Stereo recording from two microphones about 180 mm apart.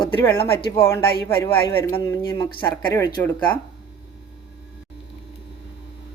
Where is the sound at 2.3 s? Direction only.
25° left (ahead or behind).